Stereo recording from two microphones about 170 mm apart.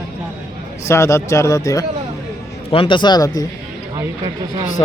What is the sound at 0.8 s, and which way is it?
Speech, 15° left (ahead or behind).